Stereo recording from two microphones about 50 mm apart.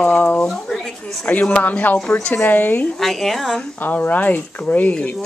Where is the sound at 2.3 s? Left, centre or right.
Left.